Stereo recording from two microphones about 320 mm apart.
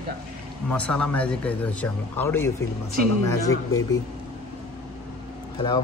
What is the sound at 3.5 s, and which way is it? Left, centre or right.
Speech, left.